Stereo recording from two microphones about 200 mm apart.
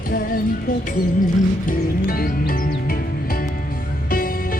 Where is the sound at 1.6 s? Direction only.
45° left (ahead or behind).